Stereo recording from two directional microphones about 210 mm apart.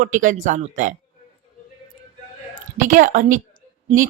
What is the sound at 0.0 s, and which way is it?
Speech, 40° right (ahead or behind).